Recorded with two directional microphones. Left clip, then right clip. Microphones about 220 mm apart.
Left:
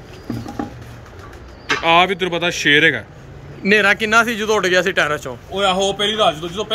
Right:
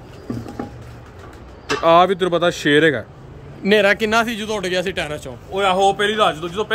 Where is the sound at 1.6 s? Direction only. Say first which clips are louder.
Right 1 dB; 30° right (ahead or behind).